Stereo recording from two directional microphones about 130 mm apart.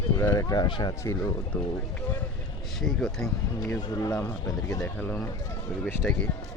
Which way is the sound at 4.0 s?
25° left (ahead or behind).